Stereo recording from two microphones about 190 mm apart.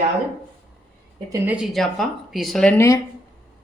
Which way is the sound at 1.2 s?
10° right (ahead or behind).